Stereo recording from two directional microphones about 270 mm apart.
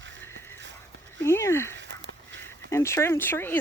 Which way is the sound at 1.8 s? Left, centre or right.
Right.